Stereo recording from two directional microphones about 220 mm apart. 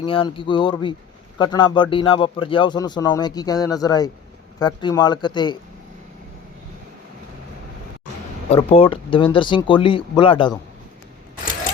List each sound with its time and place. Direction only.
0.0 s speech: 25° left (ahead or behind)
8.4 s speech: 25° left (ahead or behind)